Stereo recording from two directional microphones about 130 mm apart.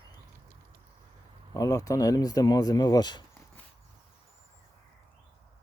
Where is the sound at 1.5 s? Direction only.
25° left (ahead or behind).